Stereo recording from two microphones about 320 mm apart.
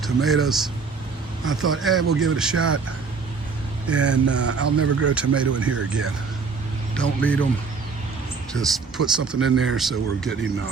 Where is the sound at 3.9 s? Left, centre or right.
Right.